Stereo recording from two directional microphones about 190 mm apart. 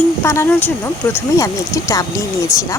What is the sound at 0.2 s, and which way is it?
Speech, 15° left (ahead or behind).